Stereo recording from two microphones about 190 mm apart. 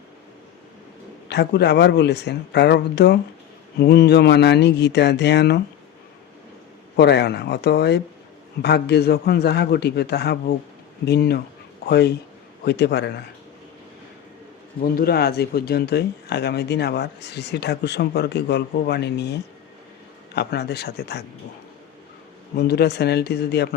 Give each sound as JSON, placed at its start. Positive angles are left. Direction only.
{"t": 1.3, "sound": "speech", "side_deg": 65}
{"t": 6.9, "sound": "speech", "side_deg": 60}
{"t": 14.9, "sound": "speech", "side_deg": 55}
{"t": 22.5, "sound": "speech", "side_deg": 60}